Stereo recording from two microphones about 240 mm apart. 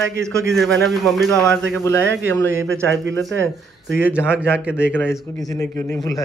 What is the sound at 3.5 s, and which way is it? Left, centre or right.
Speech, centre.